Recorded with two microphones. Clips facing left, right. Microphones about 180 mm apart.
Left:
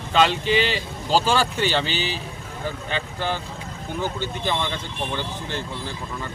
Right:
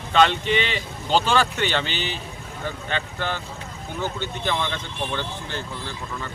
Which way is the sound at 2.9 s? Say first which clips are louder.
Left 1 dB; 10° left (ahead or behind).